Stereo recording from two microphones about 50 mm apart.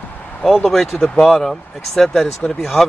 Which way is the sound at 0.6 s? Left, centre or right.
Centre.